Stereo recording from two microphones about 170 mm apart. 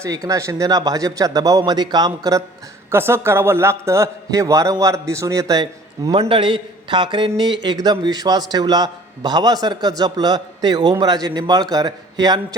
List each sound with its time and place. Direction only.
0.0 s a man's voice: 20° right (ahead or behind)
6.1 s a man's voice: 30° right (ahead or behind)